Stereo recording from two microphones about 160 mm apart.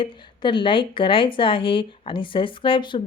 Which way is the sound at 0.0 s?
30° left (ahead or behind).